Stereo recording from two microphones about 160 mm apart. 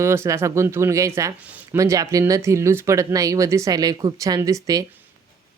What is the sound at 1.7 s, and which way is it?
Speech, 20° right (ahead or behind).